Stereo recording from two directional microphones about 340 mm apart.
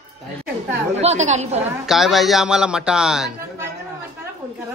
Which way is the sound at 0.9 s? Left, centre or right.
Centre.